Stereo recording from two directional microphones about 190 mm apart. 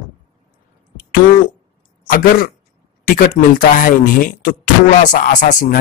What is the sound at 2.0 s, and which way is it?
Speech, 45° left (ahead or behind).